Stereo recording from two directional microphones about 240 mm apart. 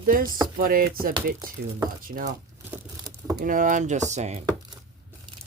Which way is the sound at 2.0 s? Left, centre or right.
Right.